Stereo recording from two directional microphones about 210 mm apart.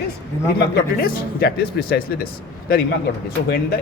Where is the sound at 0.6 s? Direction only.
50° left (ahead or behind).